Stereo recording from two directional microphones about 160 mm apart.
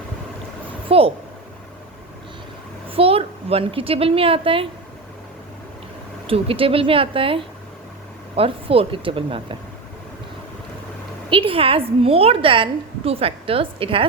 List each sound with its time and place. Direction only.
0.9 s speech: 35° right (ahead or behind)
2.9 s a woman's voice: 35° right (ahead or behind)
6.2 s a woman's voice: 35° right (ahead or behind)
11.3 s a woman's voice: 35° right (ahead or behind)